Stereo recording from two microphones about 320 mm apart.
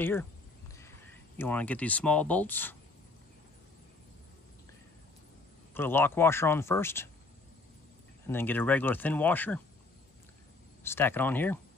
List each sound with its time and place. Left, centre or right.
0.0 s speech: centre
5.8 s speech: centre
8.3 s speech: centre
10.8 s speech: centre